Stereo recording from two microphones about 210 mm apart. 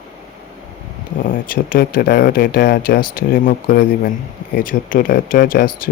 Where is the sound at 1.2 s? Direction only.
40° left (ahead or behind).